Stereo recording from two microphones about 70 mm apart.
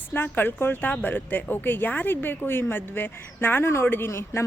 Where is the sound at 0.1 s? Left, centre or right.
Left.